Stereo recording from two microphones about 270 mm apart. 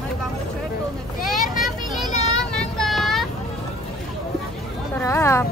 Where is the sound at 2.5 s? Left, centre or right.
Centre.